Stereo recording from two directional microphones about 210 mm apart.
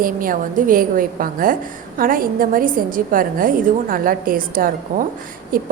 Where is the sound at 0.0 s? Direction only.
40° right (ahead or behind).